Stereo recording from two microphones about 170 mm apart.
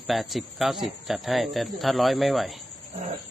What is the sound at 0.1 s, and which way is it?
Speech, centre (ahead or behind).